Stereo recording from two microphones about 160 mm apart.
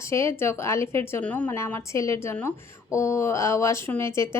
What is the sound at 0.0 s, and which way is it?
A woman's voice, 15° left (ahead or behind).